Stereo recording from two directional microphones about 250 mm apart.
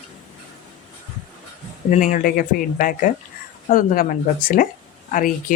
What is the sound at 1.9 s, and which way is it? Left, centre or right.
Speech, left.